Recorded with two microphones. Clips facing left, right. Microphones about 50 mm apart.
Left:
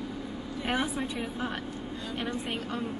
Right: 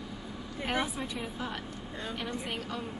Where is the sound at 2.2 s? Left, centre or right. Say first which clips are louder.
Left 5 dB; left.